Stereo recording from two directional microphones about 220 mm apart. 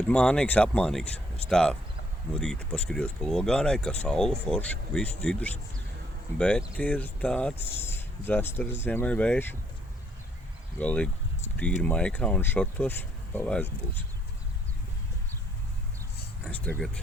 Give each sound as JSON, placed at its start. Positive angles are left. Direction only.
{"t": 0.1, "sound": "speech", "side_deg": 5}
{"t": 10.8, "sound": "speech", "side_deg": 5}
{"t": 16.4, "sound": "speech", "side_deg": 5}